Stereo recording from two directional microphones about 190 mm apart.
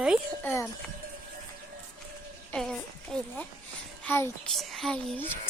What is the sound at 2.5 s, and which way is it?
A woman's voice, 5° left (ahead or behind).